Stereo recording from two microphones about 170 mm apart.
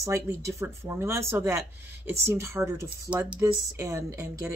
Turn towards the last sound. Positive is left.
turn(degrees=-15)  # may be behind; listen again after turning